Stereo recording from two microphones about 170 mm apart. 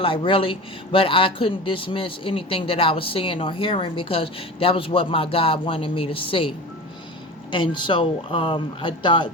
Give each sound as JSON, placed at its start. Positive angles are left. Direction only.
{"t": 0.0, "sound": "speech", "side_deg": 30}
{"t": 7.5, "sound": "speech", "side_deg": 30}